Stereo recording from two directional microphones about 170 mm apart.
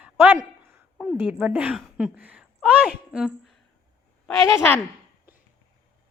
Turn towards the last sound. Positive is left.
turn(degrees=10)  # may be behind; listen again after turning